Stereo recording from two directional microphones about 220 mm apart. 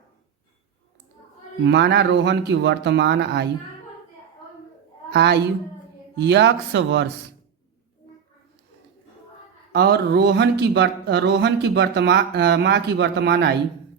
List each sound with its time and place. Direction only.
1.6 s speech: 50° right (ahead or behind)
5.1 s speech: 50° right (ahead or behind)
9.7 s speech: 45° right (ahead or behind)